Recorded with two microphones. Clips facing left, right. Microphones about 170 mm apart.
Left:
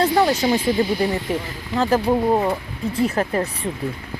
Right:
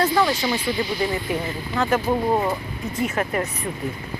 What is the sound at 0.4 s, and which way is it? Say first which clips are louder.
Speech: left 5 dB; 45° left (ahead or behind).